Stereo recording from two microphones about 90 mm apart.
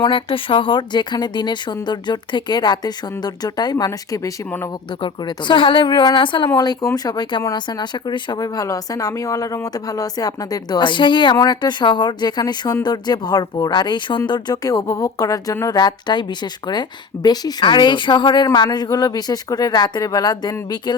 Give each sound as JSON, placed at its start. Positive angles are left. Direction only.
{"t": 0.0, "sound": "speech", "side_deg": 70}
{"t": 5.0, "sound": "speech", "side_deg": 65}
{"t": 6.8, "sound": "speech", "side_deg": 45}
{"t": 15.6, "sound": "speech", "side_deg": 50}